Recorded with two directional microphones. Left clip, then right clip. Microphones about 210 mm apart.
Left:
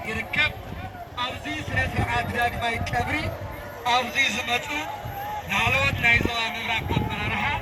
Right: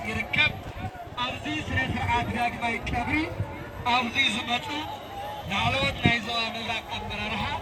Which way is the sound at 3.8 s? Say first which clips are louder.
Left 2 dB; 55° left (ahead or behind).